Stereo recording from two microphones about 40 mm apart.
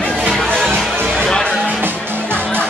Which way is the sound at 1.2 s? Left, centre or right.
Centre.